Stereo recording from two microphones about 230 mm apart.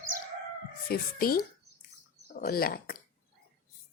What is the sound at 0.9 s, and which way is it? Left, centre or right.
Speech, left.